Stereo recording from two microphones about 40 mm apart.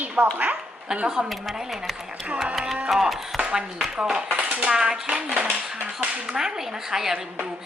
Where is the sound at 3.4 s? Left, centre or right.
Right.